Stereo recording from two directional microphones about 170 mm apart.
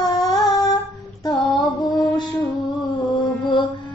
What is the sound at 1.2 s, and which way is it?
Mantra, 25° left (ahead or behind).